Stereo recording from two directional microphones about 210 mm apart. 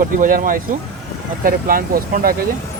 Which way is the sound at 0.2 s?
40° right (ahead or behind).